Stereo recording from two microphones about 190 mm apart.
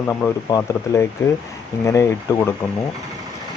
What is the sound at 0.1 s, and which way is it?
Speech, 10° left (ahead or behind).